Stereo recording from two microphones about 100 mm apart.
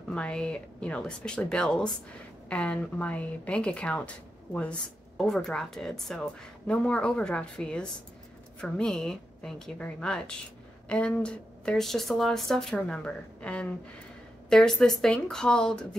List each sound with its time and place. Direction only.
0.1 s speech: 10° left (ahead or behind)